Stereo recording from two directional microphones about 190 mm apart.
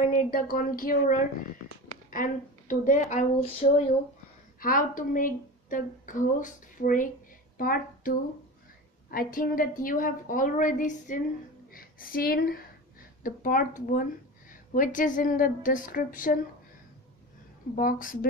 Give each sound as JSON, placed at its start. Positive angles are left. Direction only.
{"t": 0.0, "sound": "a woman's voice", "side_deg": 45}
{"t": 9.1, "sound": "a woman's voice", "side_deg": 50}
{"t": 17.7, "sound": "a woman's voice", "side_deg": 45}